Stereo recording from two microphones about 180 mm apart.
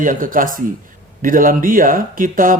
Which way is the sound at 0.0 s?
50° right (ahead or behind).